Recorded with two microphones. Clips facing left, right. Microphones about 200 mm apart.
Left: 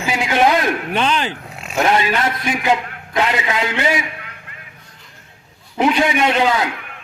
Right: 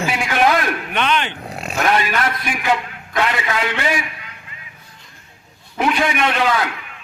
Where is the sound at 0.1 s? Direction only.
20° left (ahead or behind).